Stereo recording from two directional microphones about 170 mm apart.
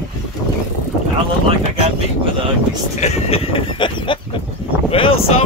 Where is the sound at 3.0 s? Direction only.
35° left (ahead or behind).